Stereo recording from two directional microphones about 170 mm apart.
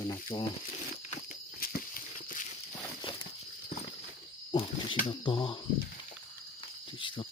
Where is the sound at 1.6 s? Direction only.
55° left (ahead or behind).